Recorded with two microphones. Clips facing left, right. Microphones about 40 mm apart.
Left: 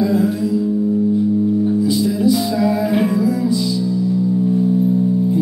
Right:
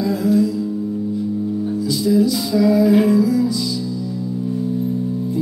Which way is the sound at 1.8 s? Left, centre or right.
Left.